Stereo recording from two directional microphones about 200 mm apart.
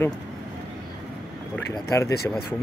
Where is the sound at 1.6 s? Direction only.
15° left (ahead or behind).